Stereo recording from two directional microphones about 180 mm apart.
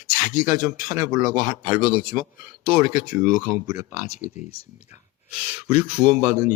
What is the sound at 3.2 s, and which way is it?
Speech, 20° right (ahead or behind).